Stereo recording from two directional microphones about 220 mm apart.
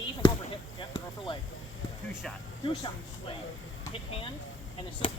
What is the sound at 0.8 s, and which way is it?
Speech, 20° left (ahead or behind).